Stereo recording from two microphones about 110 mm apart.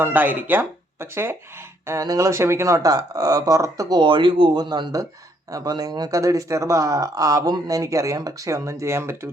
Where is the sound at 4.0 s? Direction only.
50° right (ahead or behind).